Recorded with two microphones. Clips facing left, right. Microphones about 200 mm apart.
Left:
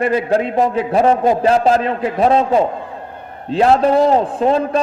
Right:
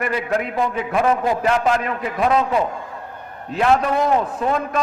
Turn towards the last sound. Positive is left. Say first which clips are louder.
# left 6 dB
turn(degrees=30)  # may be behind; listen again after turning